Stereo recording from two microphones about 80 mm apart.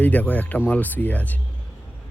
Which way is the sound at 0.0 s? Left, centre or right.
Centre.